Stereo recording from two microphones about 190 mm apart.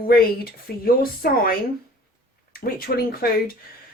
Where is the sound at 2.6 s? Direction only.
50° left (ahead or behind).